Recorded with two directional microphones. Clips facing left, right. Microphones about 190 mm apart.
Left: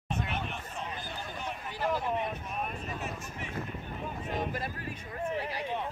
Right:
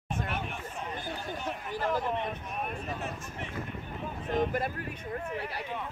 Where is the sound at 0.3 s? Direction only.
10° right (ahead or behind).